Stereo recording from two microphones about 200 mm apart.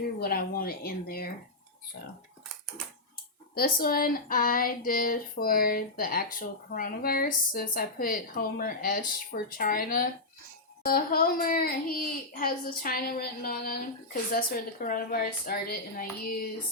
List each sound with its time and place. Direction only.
0.2 s speech: 50° left (ahead or behind)
3.5 s speech: 50° left (ahead or behind)